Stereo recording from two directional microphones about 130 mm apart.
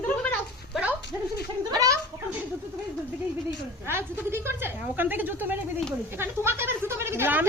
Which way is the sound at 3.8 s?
15° right (ahead or behind).